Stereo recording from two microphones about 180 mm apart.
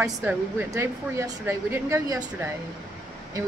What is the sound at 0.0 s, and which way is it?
A woman's voice, 10° right (ahead or behind).